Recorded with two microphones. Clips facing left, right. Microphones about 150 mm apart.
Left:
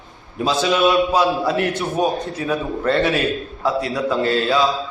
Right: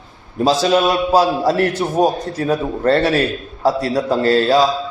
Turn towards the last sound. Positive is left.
turn(degrees=-35)  # may be behind; listen again after turning